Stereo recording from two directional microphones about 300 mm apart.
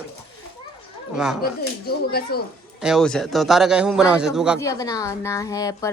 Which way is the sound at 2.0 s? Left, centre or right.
Left.